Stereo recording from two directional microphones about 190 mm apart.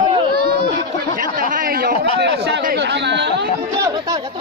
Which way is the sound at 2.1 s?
65° right (ahead or behind).